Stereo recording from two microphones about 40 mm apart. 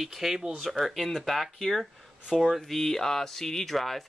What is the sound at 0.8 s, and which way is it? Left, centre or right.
Speech, centre.